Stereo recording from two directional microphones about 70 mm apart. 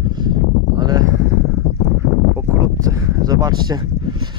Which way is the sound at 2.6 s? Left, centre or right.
Right.